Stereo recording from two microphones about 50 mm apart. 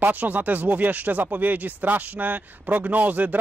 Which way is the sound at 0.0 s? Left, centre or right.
Right.